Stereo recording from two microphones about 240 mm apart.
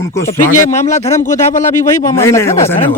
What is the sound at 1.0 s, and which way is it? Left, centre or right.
A man's voice, centre.